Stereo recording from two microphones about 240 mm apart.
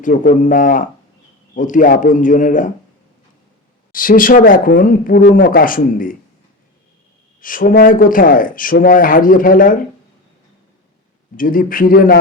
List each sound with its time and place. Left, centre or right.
0.0 s speech: left
3.9 s speech: left
7.4 s speech: left
11.3 s speech: left